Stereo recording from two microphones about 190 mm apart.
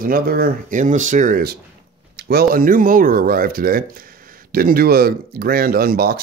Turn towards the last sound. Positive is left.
turn(degrees=-50)  # may be behind; listen again after turning